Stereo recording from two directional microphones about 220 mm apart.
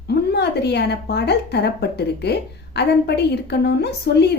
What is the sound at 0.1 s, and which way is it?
A woman's voice, 50° left (ahead or behind).